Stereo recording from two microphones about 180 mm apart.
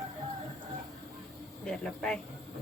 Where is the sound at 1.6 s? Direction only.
5° left (ahead or behind).